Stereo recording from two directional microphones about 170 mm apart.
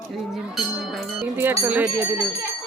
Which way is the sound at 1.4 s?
10° right (ahead or behind).